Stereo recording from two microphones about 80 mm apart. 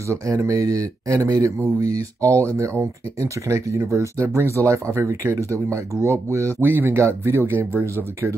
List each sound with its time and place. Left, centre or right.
0.1 s speech: right